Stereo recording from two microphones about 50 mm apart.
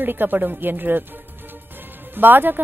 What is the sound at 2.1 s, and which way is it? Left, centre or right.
Speech, right.